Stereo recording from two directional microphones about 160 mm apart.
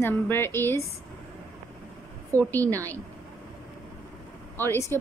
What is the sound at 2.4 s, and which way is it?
Speech, 10° left (ahead or behind).